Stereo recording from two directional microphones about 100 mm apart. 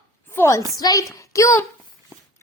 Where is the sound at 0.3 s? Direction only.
30° left (ahead or behind).